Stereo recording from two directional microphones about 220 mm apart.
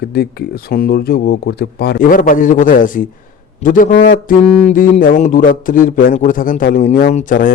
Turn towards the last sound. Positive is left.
turn(degrees=35)  # may be behind; listen again after turning